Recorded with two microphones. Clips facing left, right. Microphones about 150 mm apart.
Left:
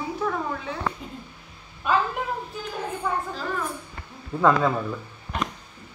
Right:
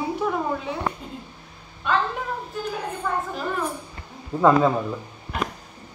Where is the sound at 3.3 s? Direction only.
15° right (ahead or behind).